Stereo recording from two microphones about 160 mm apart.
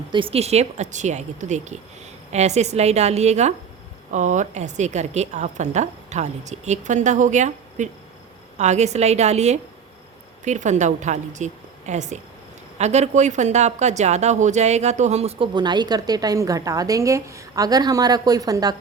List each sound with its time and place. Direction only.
0.1 s a woman's voice: 35° right (ahead or behind)
15.5 s a woman's voice: 25° right (ahead or behind)